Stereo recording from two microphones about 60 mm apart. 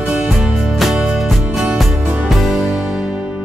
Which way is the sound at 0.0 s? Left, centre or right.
Centre.